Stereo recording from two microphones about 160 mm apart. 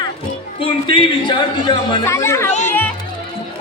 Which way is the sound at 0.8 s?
30° left (ahead or behind).